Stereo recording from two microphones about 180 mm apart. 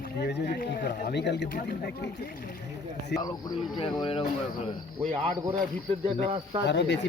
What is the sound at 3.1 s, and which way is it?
Speech, 65° left (ahead or behind).